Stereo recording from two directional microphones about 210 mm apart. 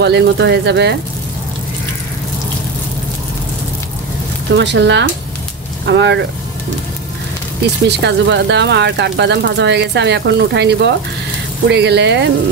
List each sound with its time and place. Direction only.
0.0 s speech: 55° right (ahead or behind)
4.6 s speech: 60° right (ahead or behind)
8.0 s speech: 55° right (ahead or behind)